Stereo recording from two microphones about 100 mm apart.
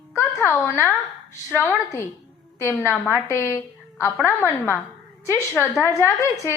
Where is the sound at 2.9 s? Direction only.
25° left (ahead or behind).